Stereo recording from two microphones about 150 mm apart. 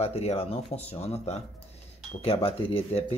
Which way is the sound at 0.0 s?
45° left (ahead or behind).